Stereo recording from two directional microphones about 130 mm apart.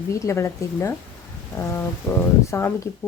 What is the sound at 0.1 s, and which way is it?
Speech, 20° left (ahead or behind).